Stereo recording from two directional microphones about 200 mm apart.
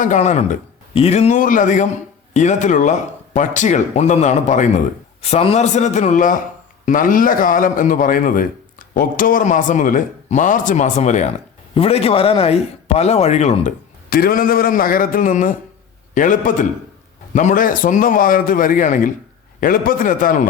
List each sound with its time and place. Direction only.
0.0 s a man's voice: 35° left (ahead or behind)